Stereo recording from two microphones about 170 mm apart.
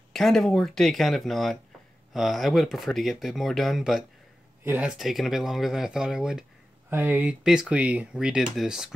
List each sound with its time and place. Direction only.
0.1 s speech: centre (ahead or behind)